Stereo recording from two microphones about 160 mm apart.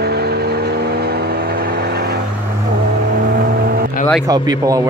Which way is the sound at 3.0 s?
65° right (ahead or behind).